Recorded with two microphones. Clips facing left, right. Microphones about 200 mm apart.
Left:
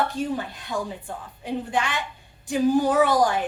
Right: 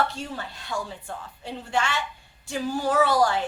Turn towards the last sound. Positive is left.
turn(degrees=15)  # may be behind; listen again after turning